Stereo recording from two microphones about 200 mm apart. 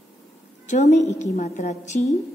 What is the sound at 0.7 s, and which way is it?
A woman's voice, 35° left (ahead or behind).